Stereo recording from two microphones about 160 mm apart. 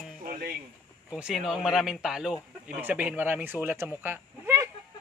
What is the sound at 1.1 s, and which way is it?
Speech, 5° right (ahead or behind).